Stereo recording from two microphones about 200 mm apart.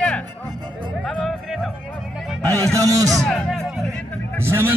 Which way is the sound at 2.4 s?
15° right (ahead or behind).